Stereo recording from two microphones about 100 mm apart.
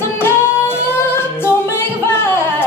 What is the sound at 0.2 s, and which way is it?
Music, 25° left (ahead or behind).